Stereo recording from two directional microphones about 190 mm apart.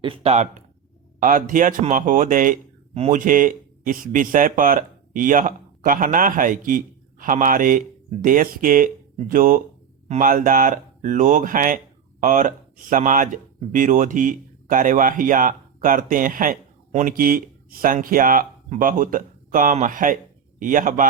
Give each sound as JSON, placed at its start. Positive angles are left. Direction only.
{"t": 0.0, "sound": "speech", "side_deg": -30}